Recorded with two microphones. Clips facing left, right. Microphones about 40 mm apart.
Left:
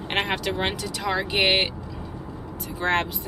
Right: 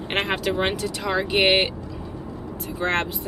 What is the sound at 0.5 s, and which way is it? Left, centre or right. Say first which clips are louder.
Speech: right 3 dB; centre.